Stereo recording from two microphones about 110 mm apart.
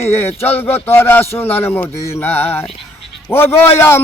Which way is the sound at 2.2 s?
15° left (ahead or behind).